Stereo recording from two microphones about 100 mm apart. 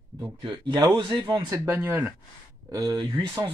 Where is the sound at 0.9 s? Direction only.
50° right (ahead or behind).